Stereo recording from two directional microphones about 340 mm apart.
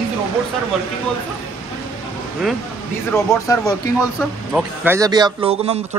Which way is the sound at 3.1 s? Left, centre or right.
Centre.